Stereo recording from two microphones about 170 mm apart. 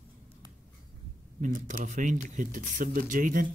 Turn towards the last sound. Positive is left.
turn(degrees=-50)  # may be behind; listen again after turning